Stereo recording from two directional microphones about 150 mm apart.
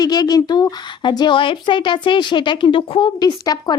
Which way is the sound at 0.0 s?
25° left (ahead or behind).